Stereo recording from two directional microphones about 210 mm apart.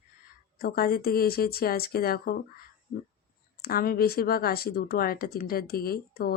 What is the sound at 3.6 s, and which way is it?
Speech, 45° left (ahead or behind).